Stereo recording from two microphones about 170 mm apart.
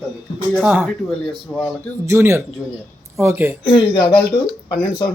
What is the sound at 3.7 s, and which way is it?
Speech, 25° left (ahead or behind).